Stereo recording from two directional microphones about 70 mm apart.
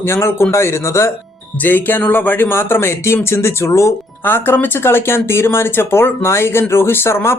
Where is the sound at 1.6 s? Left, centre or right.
Left.